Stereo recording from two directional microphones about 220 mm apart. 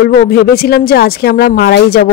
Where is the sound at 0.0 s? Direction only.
45° left (ahead or behind).